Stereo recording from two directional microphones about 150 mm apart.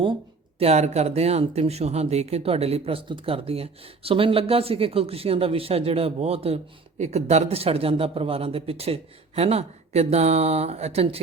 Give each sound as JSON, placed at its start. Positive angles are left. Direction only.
{"t": 0.6, "sound": "speech", "side_deg": -50}